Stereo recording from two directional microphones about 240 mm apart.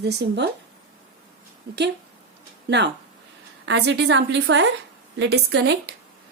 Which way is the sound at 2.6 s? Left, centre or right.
Right.